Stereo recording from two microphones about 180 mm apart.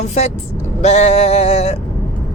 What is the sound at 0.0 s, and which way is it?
Speech, 40° left (ahead or behind).